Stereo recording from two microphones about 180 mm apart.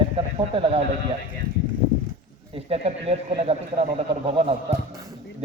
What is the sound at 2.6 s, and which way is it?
A man's voice, 35° right (ahead or behind).